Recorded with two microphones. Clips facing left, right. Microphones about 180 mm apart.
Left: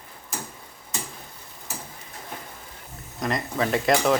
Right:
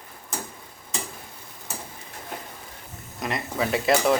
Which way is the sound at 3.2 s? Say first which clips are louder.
Left 2 dB; 5° right (ahead or behind).